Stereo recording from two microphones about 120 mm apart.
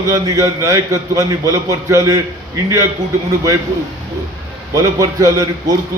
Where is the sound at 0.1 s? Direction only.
25° right (ahead or behind).